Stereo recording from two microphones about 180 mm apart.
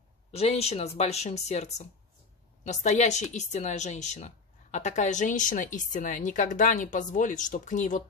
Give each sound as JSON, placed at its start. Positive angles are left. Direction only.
{"t": 0.3, "sound": "speech", "side_deg": 35}